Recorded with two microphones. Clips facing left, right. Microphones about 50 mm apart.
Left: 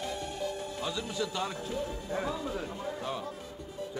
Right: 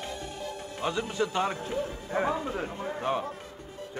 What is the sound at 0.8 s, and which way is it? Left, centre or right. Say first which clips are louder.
A man's voice: right 7 dB; right.